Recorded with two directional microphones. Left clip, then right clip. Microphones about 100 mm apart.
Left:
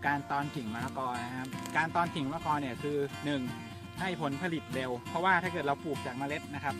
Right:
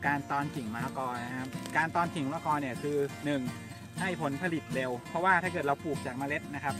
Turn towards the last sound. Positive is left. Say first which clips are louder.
# right 2 dB
turn(degrees=-20)  # may be behind; listen again after turning